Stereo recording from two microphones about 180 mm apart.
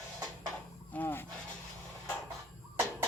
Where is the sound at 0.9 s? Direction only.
10° left (ahead or behind).